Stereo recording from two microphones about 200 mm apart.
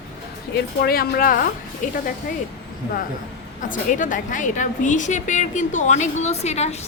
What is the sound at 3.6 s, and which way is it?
A woman's voice, 40° left (ahead or behind).